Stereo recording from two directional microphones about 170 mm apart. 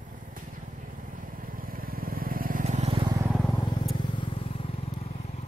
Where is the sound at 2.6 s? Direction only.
40° right (ahead or behind).